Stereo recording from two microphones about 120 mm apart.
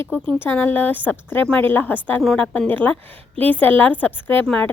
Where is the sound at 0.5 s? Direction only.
15° left (ahead or behind).